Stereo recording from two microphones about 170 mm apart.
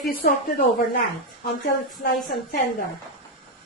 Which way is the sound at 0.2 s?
60° left (ahead or behind).